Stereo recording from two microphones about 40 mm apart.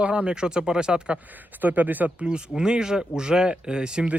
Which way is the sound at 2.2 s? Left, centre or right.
Right.